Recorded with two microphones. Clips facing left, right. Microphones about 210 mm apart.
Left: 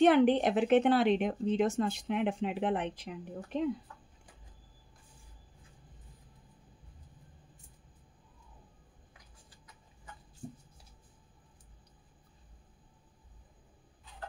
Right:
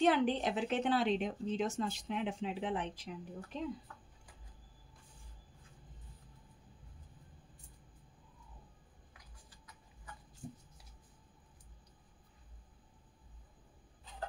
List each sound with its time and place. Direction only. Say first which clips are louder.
0.0 s a woman's voice: left 7 dB; 60° left (ahead or behind)